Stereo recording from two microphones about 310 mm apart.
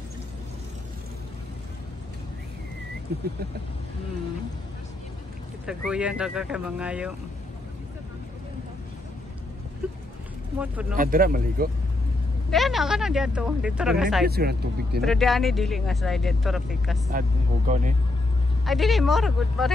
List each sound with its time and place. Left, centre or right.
5.7 s speech: centre
10.6 s speech: centre
11.0 s speech: right
12.4 s speech: centre
14.2 s speech: right
15.0 s speech: centre
17.1 s speech: right
18.7 s speech: centre